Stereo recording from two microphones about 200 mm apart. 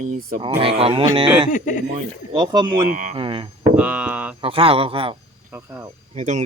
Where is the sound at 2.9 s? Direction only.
40° right (ahead or behind).